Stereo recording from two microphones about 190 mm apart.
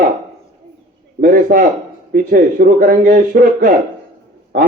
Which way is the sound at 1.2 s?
50° right (ahead or behind).